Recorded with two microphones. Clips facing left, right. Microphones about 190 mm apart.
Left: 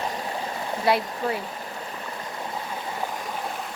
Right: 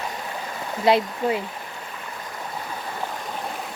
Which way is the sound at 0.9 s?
20° right (ahead or behind).